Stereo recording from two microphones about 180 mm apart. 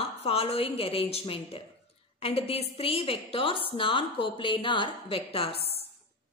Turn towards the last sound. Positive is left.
turn(degrees=30)  # may be behind; listen again after turning